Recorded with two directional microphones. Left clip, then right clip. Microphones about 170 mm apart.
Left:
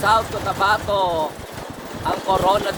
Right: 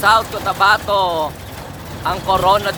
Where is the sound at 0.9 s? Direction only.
45° right (ahead or behind).